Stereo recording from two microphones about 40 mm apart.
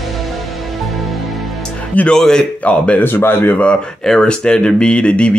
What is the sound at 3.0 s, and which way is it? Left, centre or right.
Speech, left.